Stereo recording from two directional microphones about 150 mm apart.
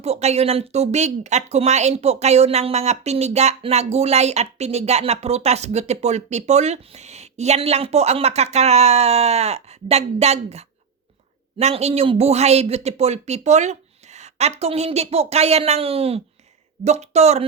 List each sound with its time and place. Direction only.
0.0 s speech: 45° right (ahead or behind)